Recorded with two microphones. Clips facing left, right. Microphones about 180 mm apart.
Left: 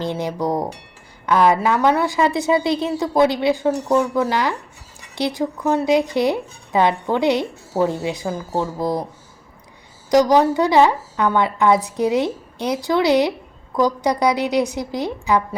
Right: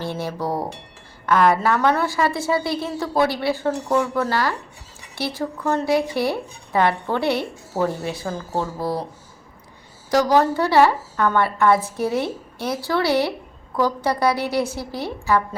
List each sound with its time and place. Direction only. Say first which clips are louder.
0.0 s a woman's voice: left 4 dB; 20° left (ahead or behind)
10.1 s a woman's voice: left 3 dB; 15° left (ahead or behind)